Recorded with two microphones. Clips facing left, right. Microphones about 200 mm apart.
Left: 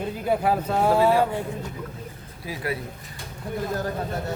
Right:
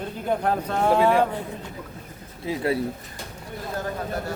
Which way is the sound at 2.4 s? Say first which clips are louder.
Right 5 dB; 25° right (ahead or behind).